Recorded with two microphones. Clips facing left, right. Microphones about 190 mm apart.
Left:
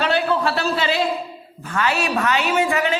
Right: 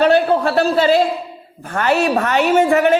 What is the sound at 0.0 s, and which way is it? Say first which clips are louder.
A woman's voice: right 6 dB; 50° right (ahead or behind).